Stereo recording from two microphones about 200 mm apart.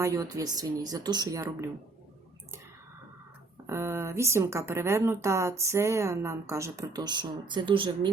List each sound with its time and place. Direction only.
0.0 s speech: 15° right (ahead or behind)
3.7 s speech: 10° right (ahead or behind)